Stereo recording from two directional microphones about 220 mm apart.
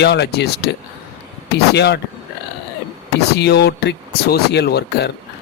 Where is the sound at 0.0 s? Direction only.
50° left (ahead or behind).